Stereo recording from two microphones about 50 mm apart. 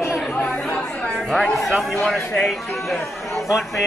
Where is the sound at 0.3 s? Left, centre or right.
Left.